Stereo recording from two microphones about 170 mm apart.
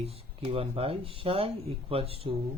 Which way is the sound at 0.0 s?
35° right (ahead or behind).